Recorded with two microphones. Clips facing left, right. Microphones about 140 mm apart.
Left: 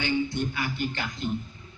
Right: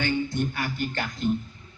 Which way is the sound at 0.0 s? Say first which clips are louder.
Right 1 dB; 50° right (ahead or behind).